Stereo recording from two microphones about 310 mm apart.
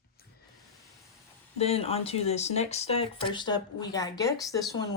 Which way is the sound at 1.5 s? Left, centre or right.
Centre.